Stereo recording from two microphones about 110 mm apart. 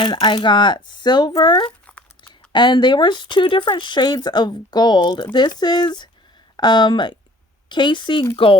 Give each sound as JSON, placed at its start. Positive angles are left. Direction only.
{"t": 0.0, "sound": "speech", "side_deg": 45}